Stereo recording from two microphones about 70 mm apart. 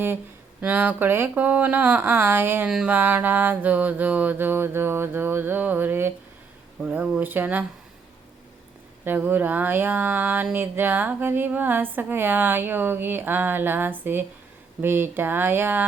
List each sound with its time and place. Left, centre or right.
0.6 s speech: right
6.8 s speech: centre
9.0 s speech: right